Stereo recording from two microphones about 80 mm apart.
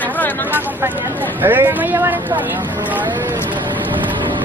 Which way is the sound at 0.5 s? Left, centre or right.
Right.